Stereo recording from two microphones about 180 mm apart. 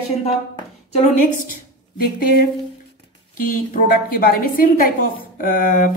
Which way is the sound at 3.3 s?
50° left (ahead or behind).